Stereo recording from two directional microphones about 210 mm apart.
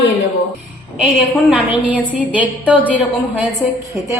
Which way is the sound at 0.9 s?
Centre (ahead or behind).